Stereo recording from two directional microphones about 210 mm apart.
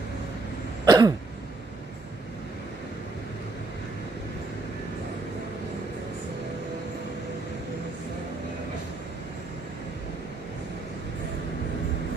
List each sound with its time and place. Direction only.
0.9 s cough: 20° right (ahead or behind)